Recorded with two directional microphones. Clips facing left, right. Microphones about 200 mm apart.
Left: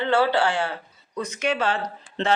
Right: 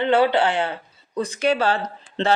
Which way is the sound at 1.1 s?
35° right (ahead or behind).